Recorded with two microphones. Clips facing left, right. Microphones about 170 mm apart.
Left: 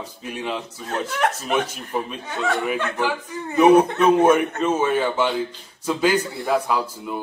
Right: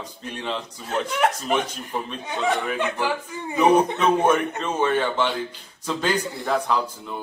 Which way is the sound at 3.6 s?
10° left (ahead or behind).